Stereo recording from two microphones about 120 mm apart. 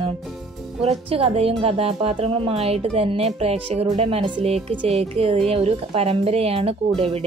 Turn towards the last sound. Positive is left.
turn(degrees=-55)  # may be behind; listen again after turning